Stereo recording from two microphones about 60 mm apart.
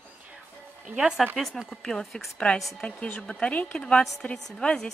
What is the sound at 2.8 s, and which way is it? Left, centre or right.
A woman's voice, centre.